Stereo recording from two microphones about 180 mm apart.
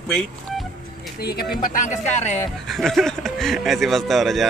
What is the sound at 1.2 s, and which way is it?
Speech, 60° left (ahead or behind).